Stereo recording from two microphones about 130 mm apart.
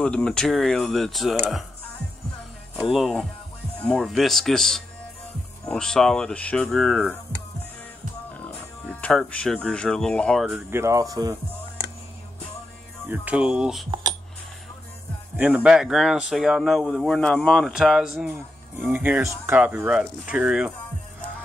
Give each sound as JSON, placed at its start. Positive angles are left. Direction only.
{"t": 0.0, "sound": "speech", "side_deg": 5}
{"t": 2.8, "sound": "speech", "side_deg": 0}
{"t": 8.8, "sound": "speech", "side_deg": 10}
{"t": 10.5, "sound": "speech", "side_deg": -20}
{"t": 13.1, "sound": "speech", "side_deg": -10}
{"t": 15.3, "sound": "speech", "side_deg": -10}